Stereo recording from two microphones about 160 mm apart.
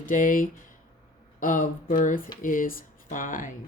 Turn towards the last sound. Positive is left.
turn(degrees=55)  # may be behind; listen again after turning